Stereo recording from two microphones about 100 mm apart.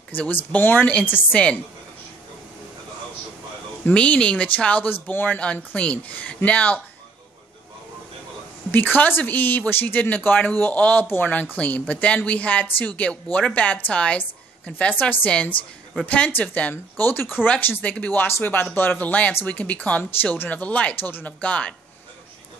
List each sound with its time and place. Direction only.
0.1 s speech: 15° left (ahead or behind)
3.8 s speech: 10° left (ahead or behind)
8.7 s speech: 15° left (ahead or behind)